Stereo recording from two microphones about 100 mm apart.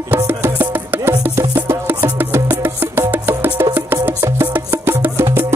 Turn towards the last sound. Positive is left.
turn(degrees=-20)  # may be behind; listen again after turning